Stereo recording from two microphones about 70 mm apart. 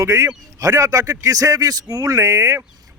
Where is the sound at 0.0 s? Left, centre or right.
Right.